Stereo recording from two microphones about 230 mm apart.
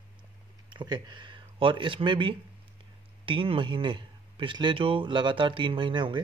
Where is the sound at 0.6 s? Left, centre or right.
Centre.